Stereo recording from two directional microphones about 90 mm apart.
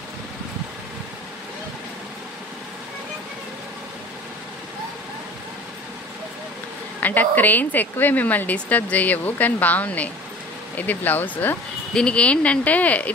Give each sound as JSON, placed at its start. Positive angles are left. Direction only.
{"t": 7.0, "sound": "speech", "side_deg": 20}